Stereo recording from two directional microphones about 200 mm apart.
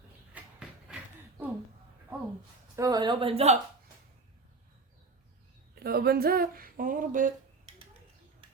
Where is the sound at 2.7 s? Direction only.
20° right (ahead or behind).